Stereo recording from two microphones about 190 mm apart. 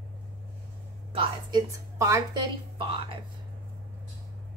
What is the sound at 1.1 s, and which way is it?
A woman's voice, 20° right (ahead or behind).